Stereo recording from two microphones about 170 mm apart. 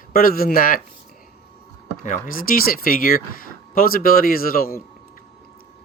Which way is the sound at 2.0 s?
50° left (ahead or behind).